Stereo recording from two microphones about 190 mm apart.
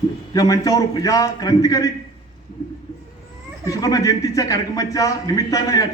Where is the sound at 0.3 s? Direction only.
20° left (ahead or behind).